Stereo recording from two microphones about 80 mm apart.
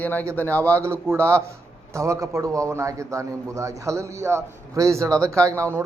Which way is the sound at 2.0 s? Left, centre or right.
Right.